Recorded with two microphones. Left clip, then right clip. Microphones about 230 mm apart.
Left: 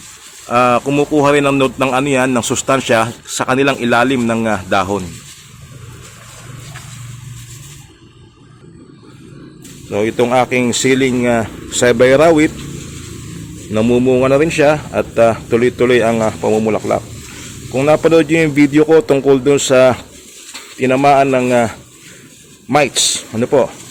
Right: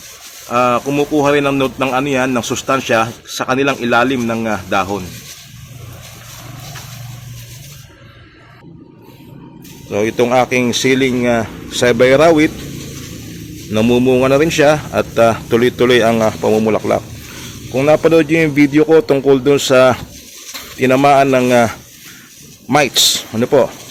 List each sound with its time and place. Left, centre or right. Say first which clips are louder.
0.4 s speech: left 2 dB; centre
9.9 s a man's voice: even; centre
13.7 s a man's voice: even; centre